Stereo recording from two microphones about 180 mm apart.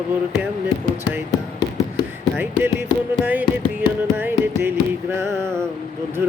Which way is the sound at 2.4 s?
15° right (ahead or behind).